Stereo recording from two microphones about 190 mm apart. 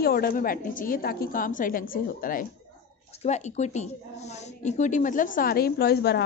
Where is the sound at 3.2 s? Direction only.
35° left (ahead or behind).